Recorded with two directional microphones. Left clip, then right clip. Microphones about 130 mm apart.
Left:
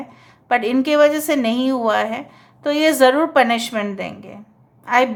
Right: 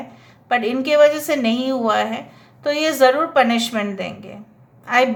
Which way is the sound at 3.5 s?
30° left (ahead or behind).